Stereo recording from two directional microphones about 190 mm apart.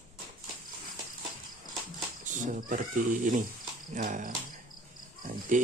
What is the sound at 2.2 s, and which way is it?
Cricket, 45° right (ahead or behind).